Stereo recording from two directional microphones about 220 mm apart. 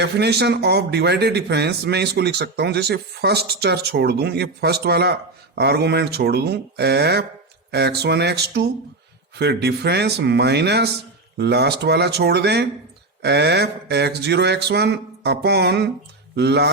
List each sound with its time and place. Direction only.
0.0 s speech: 50° right (ahead or behind)